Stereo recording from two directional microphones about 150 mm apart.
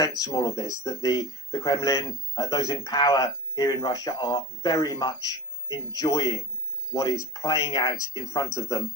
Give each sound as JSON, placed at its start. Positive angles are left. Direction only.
{"t": 0.2, "sound": "speech", "side_deg": 25}